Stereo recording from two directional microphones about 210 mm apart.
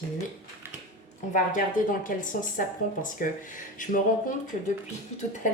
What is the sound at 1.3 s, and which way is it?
Speech, 40° left (ahead or behind).